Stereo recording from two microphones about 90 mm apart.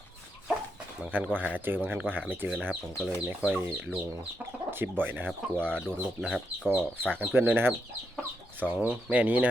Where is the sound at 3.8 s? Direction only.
15° right (ahead or behind).